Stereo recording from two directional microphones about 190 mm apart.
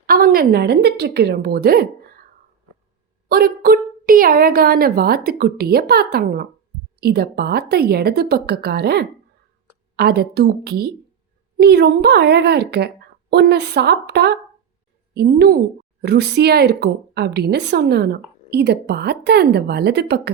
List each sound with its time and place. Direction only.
0.0 s speech: 50° right (ahead or behind)
3.2 s a woman's voice: 55° right (ahead or behind)